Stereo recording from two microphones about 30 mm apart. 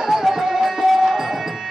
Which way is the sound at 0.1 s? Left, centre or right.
Centre.